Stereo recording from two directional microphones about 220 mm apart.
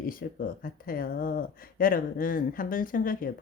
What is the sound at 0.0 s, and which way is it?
A woman's voice, 40° left (ahead or behind).